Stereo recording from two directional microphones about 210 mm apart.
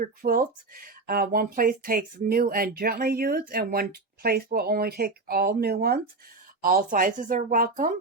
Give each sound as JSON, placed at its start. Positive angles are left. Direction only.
{"t": 0.0, "sound": "speech", "side_deg": -40}